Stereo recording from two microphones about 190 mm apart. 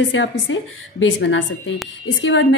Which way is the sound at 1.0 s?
80° left.